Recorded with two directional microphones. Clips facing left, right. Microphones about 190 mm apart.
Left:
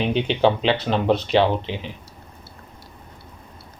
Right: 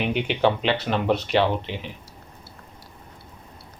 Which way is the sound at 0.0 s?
25° left (ahead or behind).